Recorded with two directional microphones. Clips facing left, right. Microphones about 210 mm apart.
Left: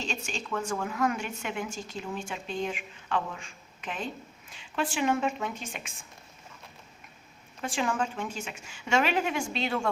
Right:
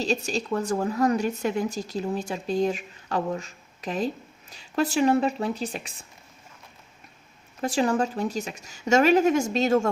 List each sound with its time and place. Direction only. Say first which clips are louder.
0.0 s speech: right 9 dB; 35° right (ahead or behind)
7.6 s speech: right 7 dB; 40° right (ahead or behind)